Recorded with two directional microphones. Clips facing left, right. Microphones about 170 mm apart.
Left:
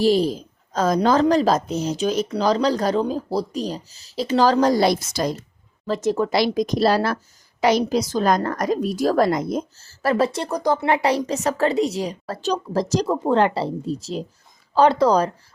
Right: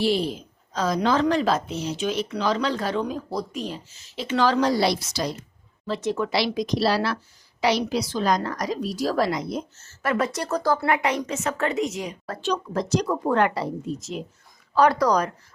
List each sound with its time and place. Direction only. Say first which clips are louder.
0.0 s a woman's voice: left 5 dB; 40° left (ahead or behind)
9.7 s a woman's voice: left 4 dB; 35° left (ahead or behind)
10.5 s speech: left 2 dB; 15° left (ahead or behind)
10.8 s a woman's voice: left 4 dB; 30° left (ahead or behind)